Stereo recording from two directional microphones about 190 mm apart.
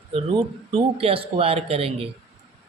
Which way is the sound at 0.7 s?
30° right (ahead or behind).